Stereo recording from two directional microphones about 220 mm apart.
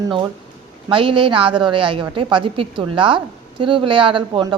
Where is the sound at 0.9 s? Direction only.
25° right (ahead or behind).